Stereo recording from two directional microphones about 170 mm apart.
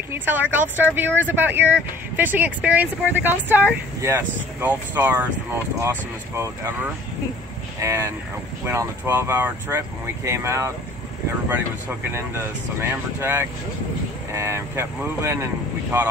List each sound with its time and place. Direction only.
0.1 s speech: 10° right (ahead or behind)